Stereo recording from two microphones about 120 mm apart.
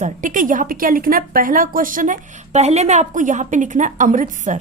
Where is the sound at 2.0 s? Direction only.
90° right.